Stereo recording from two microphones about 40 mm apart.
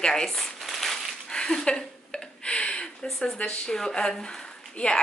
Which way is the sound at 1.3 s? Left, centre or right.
Centre.